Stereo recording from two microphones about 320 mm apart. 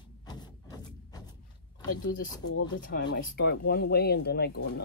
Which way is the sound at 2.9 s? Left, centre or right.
Left.